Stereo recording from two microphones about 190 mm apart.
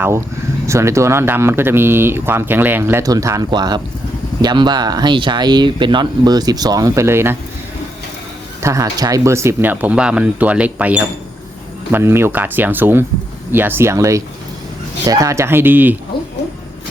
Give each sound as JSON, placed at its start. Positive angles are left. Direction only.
{"t": 0.7, "sound": "speech", "side_deg": -15}
{"t": 8.6, "sound": "speech", "side_deg": -15}